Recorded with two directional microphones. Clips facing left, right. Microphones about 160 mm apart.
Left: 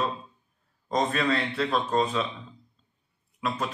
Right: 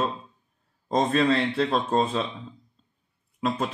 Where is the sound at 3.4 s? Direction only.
25° right (ahead or behind).